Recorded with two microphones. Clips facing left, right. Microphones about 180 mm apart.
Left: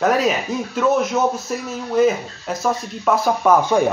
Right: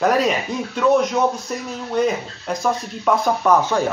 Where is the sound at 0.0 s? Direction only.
Centre (ahead or behind).